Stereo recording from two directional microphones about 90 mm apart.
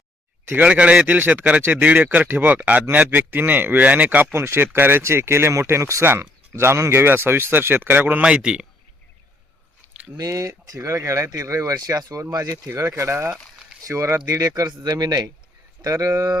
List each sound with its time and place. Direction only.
0.4 s speech: 20° right (ahead or behind)
10.2 s speech: 40° right (ahead or behind)